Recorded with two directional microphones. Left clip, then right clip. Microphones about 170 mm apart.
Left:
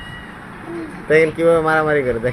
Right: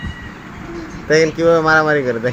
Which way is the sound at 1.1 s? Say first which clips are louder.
Right 1 dB; 5° right (ahead or behind).